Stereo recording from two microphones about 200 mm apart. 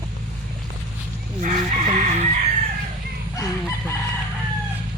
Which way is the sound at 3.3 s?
15° left (ahead or behind).